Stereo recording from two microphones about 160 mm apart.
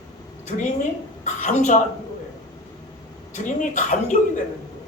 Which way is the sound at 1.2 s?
45° left (ahead or behind).